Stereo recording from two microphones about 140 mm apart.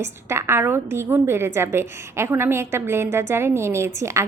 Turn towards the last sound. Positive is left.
turn(degrees=-20)  # may be behind; listen again after turning